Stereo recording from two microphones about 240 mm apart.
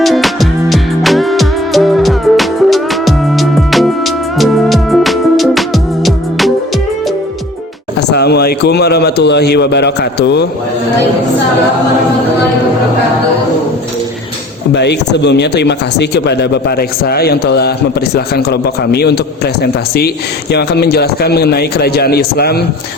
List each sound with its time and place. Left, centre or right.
0.0 s music: centre
8.1 s a man's voice: left
14.7 s speech: left
20.5 s a man's voice: left